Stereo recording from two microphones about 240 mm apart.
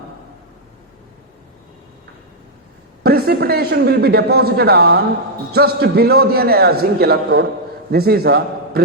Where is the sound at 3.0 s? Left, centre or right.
Right.